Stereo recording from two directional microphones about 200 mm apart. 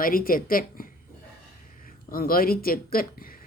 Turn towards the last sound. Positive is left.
turn(degrees=45)  # may be behind; listen again after turning